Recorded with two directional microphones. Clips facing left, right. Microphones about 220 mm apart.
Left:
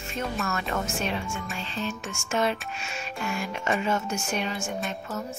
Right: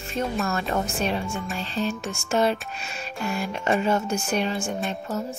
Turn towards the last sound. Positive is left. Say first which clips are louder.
# right 4 dB
turn(degrees=-30)  # may be behind; listen again after turning